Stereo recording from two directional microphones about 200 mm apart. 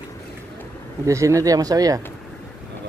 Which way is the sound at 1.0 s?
15° right (ahead or behind).